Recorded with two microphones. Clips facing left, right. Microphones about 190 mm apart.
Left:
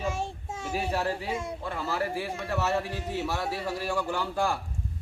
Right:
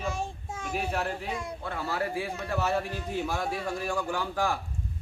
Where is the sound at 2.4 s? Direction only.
5° left (ahead or behind).